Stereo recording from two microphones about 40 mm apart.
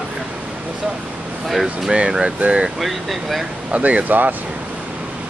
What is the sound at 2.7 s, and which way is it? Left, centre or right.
Speech, centre.